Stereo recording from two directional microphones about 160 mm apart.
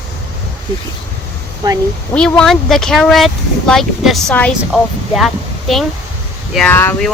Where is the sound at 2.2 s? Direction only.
5° left (ahead or behind).